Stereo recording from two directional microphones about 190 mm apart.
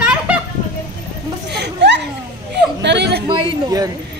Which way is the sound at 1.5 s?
65° right (ahead or behind).